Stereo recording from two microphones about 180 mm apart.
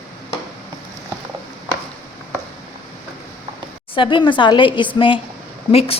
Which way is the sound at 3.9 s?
30° left (ahead or behind).